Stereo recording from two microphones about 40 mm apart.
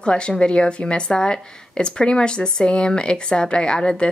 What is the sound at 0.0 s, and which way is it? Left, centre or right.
A woman's voice, left.